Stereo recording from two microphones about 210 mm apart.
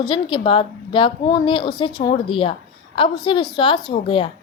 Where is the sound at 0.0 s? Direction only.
20° left (ahead or behind).